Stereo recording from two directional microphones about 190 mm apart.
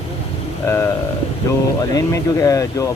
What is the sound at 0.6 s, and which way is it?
Speech, 15° left (ahead or behind).